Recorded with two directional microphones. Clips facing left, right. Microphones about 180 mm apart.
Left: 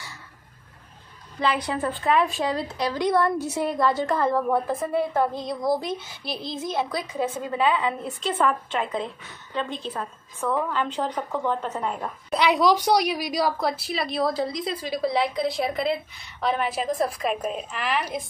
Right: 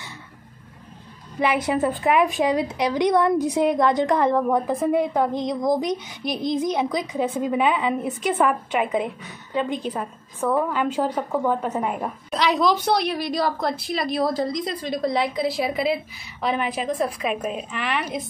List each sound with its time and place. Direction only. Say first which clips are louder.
1.4 s a woman's voice: right 4 dB; 20° right (ahead or behind)
12.3 s a woman's voice: left 1 dB; 10° left (ahead or behind)